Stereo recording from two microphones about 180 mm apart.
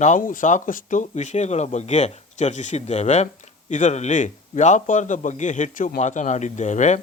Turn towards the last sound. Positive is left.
turn(degrees=40)  # may be behind; listen again after turning